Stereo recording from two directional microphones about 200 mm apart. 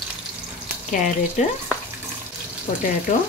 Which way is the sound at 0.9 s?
40° left (ahead or behind).